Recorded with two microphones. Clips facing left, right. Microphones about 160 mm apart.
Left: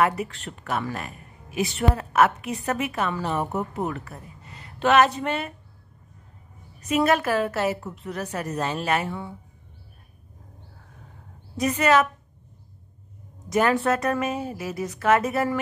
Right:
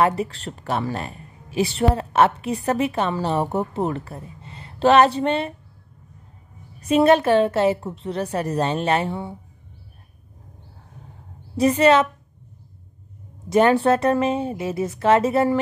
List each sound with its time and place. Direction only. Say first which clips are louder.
0.0 s speech: right 3 dB; 30° right (ahead or behind)
6.8 s speech: right 6 dB; 30° right (ahead or behind)
11.8 s speech: right 3 dB; 30° right (ahead or behind)
13.5 s speech: right 5 dB; 30° right (ahead or behind)